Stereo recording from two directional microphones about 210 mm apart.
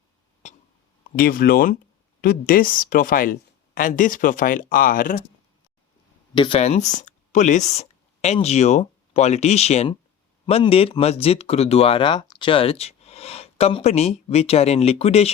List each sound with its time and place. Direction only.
0.4 s a sound: 35° left (ahead or behind)
1.1 s speech: 45° left (ahead or behind)
6.3 s speech: 25° left (ahead or behind)